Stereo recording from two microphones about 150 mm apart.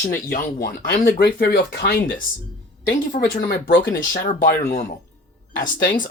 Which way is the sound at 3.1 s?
70° left (ahead or behind).